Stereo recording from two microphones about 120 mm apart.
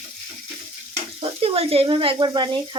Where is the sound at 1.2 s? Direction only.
50° right (ahead or behind).